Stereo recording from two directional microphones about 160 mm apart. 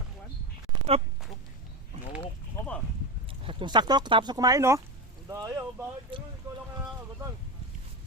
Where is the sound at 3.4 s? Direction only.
35° right (ahead or behind).